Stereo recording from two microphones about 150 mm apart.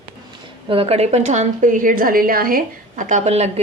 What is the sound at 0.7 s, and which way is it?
A woman's voice, 40° right (ahead or behind).